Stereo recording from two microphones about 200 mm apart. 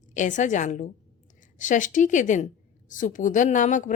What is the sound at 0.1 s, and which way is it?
A woman's voice, 40° left (ahead or behind).